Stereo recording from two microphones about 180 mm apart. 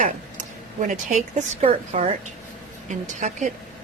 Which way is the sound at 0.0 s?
45° right (ahead or behind).